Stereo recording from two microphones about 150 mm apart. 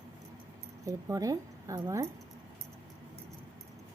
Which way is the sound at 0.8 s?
20° right (ahead or behind).